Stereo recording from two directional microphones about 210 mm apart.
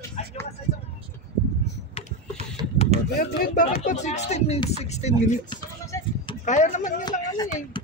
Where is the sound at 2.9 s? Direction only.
30° right (ahead or behind).